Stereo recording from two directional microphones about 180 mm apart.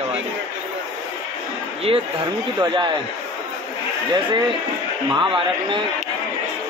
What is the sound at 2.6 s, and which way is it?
Speech, 25° right (ahead or behind).